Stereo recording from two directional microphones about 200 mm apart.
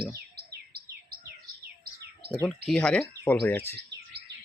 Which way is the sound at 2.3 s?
Centre (ahead or behind).